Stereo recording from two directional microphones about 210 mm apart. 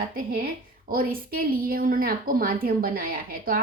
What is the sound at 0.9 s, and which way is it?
A woman's voice, 45° right (ahead or behind).